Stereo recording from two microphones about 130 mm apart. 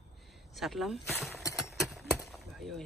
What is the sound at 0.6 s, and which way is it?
Speech, centre (ahead or behind).